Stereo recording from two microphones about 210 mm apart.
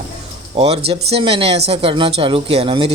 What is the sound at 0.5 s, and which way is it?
Speech, 30° right (ahead or behind).